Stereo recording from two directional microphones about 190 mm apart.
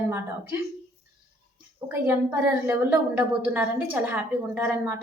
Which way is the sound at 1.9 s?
10° right (ahead or behind).